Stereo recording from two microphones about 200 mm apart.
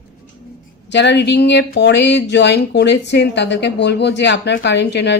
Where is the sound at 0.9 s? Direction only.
60° left (ahead or behind).